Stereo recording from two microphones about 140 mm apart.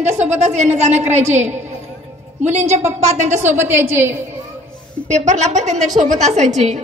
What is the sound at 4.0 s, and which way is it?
Speech, 15° right (ahead or behind).